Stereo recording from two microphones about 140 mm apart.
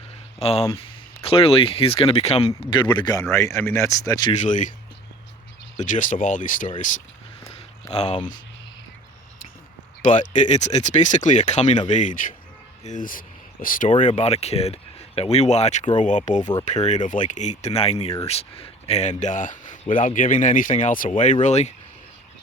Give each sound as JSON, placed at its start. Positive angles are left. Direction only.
{"t": 0.3, "sound": "speech", "side_deg": 45}
{"t": 4.3, "sound": "speech", "side_deg": 60}
{"t": 5.7, "sound": "speech", "side_deg": 65}
{"t": 7.9, "sound": "speech", "side_deg": 45}
{"t": 10.1, "sound": "speech", "side_deg": 65}
{"t": 14.2, "sound": "speech", "side_deg": 50}
{"t": 21.4, "sound": "speech", "side_deg": 55}